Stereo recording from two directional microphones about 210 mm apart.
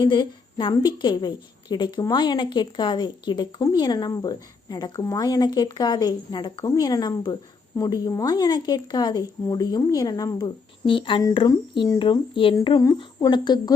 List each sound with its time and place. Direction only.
0.0 s a woman's voice: 20° left (ahead or behind)